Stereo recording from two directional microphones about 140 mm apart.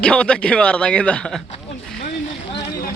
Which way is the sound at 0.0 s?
5° left (ahead or behind).